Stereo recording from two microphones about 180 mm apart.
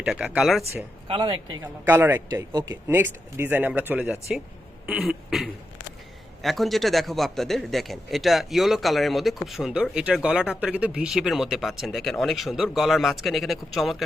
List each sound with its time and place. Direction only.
0.0 s a man's voice: 5° right (ahead or behind)
1.0 s speech: 30° right (ahead or behind)
1.6 s a man's voice: 10° right (ahead or behind)